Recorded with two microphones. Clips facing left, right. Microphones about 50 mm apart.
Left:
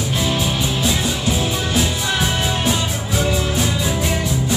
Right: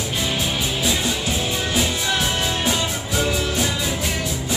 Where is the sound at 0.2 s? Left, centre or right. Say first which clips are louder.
Left 3 dB; centre.